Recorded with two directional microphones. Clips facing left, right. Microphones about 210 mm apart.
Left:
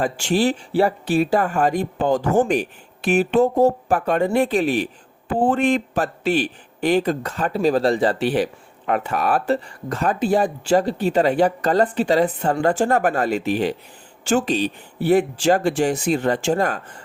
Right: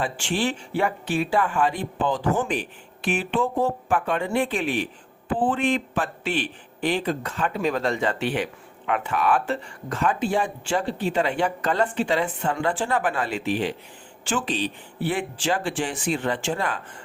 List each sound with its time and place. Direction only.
0.0 s speech: 40° left (ahead or behind)